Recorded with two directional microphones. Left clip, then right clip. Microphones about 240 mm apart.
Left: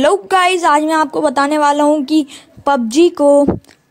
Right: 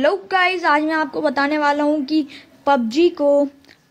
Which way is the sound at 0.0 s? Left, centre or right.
Left.